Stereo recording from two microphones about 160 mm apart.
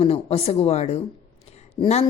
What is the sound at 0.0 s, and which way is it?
A woman's voice, 40° left (ahead or behind).